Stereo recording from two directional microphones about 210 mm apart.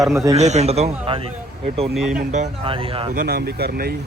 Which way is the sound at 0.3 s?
30° right (ahead or behind).